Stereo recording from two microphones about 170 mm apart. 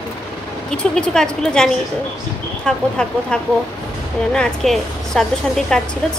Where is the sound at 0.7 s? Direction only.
5° left (ahead or behind).